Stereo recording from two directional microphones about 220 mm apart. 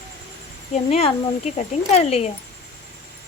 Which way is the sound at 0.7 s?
30° left (ahead or behind).